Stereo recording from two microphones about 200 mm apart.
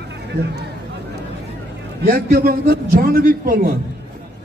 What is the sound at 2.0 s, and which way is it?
A man's voice, 50° right (ahead or behind).